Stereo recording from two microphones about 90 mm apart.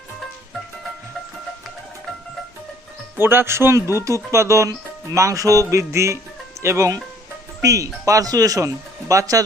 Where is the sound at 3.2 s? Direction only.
25° right (ahead or behind).